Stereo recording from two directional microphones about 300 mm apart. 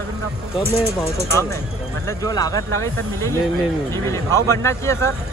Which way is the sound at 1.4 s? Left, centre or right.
Centre.